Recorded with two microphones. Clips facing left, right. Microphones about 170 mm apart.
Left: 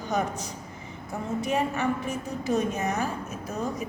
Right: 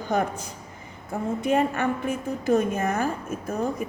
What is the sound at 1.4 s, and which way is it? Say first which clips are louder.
A woman's voice: right 4 dB; 55° right (ahead or behind).